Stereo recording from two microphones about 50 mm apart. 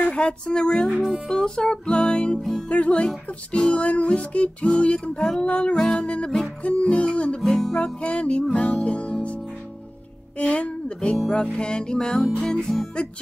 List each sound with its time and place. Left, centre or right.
0.0 s music: centre
7.4 s music: centre
7.7 s music: left
10.3 s speech: left
11.1 s music: centre